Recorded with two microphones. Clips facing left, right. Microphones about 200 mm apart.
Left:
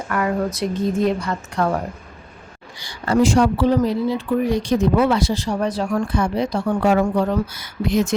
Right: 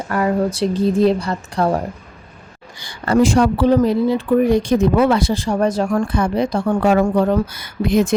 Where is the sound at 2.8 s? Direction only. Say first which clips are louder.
Right 2 dB; 55° right (ahead or behind).